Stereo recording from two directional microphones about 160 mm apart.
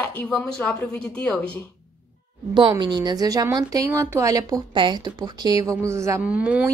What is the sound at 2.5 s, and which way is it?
A woman's voice, 30° right (ahead or behind).